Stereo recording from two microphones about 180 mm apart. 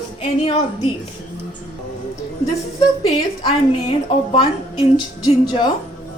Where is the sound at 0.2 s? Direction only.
30° left (ahead or behind).